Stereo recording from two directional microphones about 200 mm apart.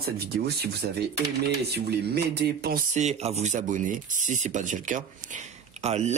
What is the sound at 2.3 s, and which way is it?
Speech, 55° right (ahead or behind).